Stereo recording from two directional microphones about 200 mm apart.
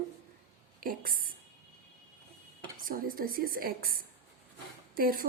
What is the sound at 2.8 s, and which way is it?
A woman's voice, 45° right (ahead or behind).